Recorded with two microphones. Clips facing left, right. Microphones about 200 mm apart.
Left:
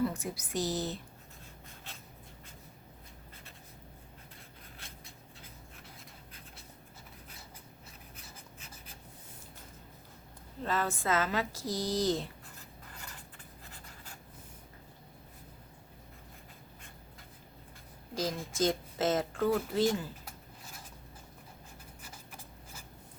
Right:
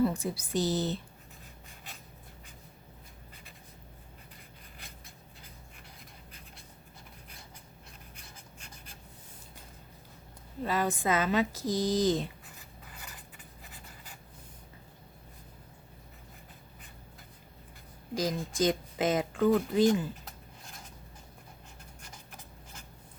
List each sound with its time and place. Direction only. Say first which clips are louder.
0.1 s speech: right 4 dB; 30° right (ahead or behind)
10.6 s speech: right 3 dB; 10° right (ahead or behind)
18.1 s speech: right 3 dB; 15° right (ahead or behind)